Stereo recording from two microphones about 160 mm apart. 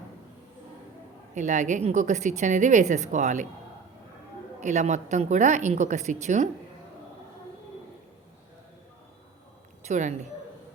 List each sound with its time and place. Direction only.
1.4 s a woman's voice: 50° right (ahead or behind)
4.6 s a woman's voice: 50° right (ahead or behind)
9.8 s a woman's voice: 45° right (ahead or behind)